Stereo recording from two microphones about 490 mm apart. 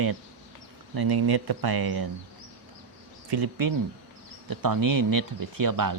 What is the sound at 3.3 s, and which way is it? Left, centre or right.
Speech, right.